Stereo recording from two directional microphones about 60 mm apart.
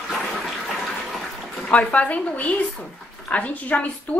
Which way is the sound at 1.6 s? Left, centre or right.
Left.